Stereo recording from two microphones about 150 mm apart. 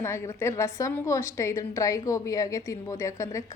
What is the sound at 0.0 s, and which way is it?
A woman's voice, 15° left (ahead or behind).